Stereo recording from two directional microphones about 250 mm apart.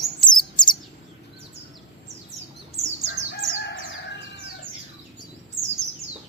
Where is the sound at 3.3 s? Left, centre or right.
Left.